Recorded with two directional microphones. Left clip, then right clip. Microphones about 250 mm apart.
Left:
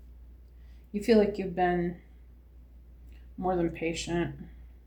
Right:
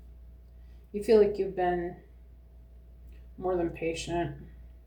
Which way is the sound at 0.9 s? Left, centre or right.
Left.